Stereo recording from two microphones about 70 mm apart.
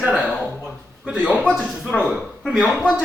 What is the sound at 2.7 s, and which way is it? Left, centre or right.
Speech, centre.